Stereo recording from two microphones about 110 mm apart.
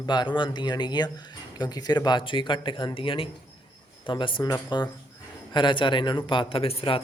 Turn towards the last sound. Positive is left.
turn(degrees=60)  # may be behind; listen again after turning